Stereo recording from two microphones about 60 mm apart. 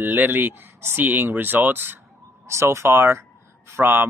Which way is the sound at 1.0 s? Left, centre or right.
Right.